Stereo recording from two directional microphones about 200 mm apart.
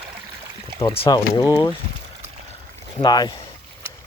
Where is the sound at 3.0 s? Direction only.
20° left (ahead or behind).